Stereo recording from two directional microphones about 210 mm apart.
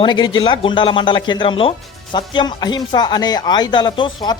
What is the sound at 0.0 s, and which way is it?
Speech, 20° left (ahead or behind).